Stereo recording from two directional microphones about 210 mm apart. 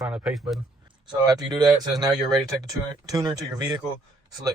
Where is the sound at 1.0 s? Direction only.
20° right (ahead or behind).